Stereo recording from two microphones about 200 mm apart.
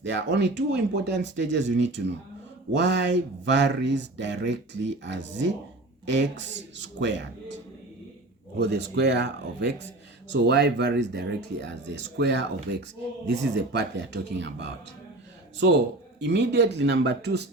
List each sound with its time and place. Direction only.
0.0 s speech: 60° right (ahead or behind)
8.5 s speech: 60° right (ahead or behind)
16.2 s speech: 60° right (ahead or behind)